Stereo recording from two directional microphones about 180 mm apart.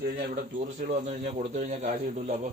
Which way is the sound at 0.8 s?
55° right (ahead or behind).